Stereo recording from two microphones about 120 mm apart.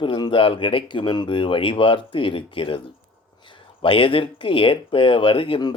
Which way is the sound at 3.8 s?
45° left (ahead or behind).